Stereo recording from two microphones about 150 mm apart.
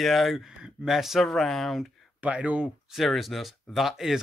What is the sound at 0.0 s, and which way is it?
Speech, centre (ahead or behind).